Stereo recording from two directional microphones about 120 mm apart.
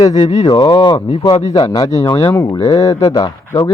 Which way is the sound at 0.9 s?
65° left (ahead or behind).